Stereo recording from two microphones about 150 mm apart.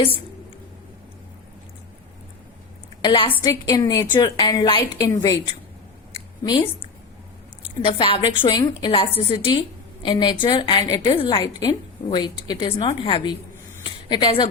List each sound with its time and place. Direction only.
3.0 s a woman's voice: 35° left (ahead or behind)
3.4 s a woman's voice: 25° left (ahead or behind)
7.9 s a woman's voice: 35° left (ahead or behind)
11.1 s a woman's voice: 35° left (ahead or behind)
11.3 s a woman's voice: 25° left (ahead or behind)